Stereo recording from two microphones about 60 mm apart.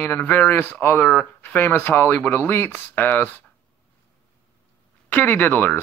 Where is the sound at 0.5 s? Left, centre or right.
Left.